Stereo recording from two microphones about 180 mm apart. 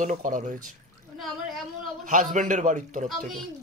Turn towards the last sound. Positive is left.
turn(degrees=-45)  # may be behind; listen again after turning